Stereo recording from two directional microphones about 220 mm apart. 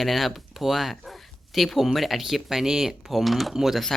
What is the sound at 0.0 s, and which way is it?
Speech, centre (ahead or behind).